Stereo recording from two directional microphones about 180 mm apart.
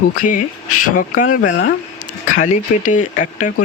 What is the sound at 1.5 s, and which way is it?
Speech, 90° left.